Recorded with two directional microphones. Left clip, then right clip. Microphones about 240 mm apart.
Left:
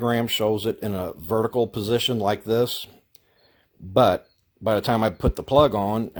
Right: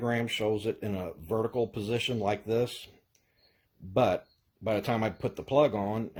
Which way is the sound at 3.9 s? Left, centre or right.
Left.